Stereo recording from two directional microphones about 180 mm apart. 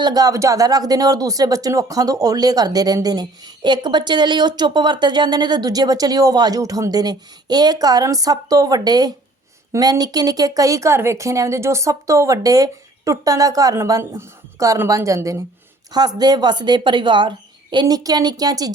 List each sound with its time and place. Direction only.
0.0 s a woman's voice: 20° right (ahead or behind)